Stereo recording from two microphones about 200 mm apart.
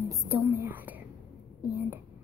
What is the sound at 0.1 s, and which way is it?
Whispering, 15° right (ahead or behind).